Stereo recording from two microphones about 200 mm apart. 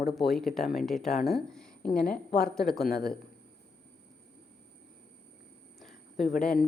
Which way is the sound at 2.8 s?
50° left (ahead or behind).